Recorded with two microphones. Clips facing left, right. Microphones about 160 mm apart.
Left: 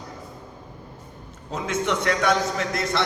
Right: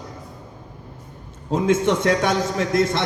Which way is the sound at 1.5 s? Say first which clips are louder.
Right 7 dB; 50° right (ahead or behind).